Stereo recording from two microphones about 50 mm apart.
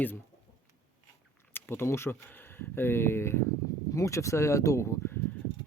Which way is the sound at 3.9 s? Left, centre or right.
Left.